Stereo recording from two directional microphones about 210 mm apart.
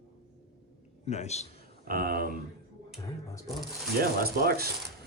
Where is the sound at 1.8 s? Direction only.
45° right (ahead or behind).